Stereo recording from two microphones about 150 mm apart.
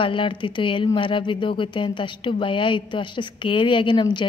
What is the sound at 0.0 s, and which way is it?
A woman's voice, 35° left (ahead or behind).